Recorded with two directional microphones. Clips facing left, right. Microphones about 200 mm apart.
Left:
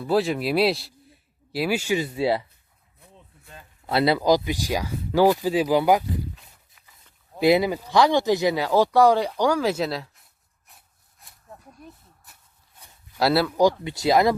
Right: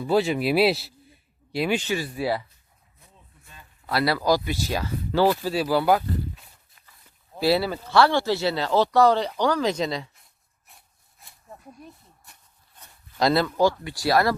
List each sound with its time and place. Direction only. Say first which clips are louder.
0.0 s speech: even; centre (ahead or behind)
2.0 s speech: left 3 dB; 25° left (ahead or behind)
3.8 s speech: left 3 dB; 25° left (ahead or behind)
7.3 s speech: left 3 dB; 20° left (ahead or behind)
10.7 s a sound: even; centre (ahead or behind)
12.8 s speech: even; 5° left (ahead or behind)